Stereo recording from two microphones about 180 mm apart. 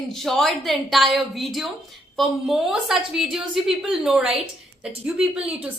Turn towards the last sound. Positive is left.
turn(degrees=-10)  # may be behind; listen again after turning